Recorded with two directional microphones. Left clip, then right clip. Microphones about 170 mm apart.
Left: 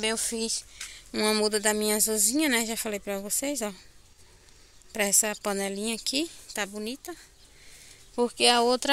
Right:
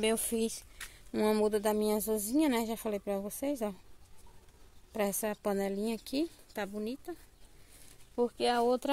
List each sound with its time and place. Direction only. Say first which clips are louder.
0.0 s speech: left 2 dB; 25° right (ahead or behind)
0.7 s speech: left 4 dB; 10° right (ahead or behind)
5.2 s speech: left 4 dB; 5° right (ahead or behind)
8.2 s speech: left 7 dB; 15° left (ahead or behind)